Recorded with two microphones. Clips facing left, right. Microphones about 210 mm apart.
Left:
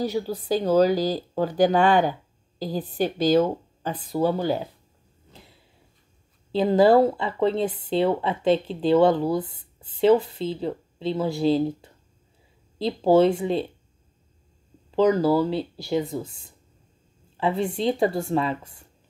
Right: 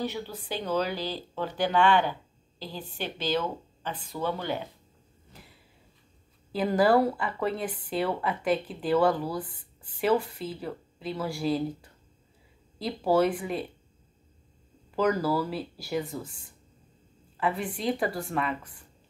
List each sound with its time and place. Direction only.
0.1 s speech: 40° left (ahead or behind)
6.5 s speech: 25° left (ahead or behind)
15.0 s speech: 25° left (ahead or behind)
17.4 s speech: 25° left (ahead or behind)